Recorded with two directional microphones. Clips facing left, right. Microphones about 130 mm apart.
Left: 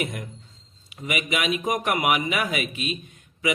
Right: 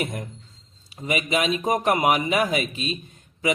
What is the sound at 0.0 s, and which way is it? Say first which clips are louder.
A man's voice: right 1 dB; 35° right (ahead or behind).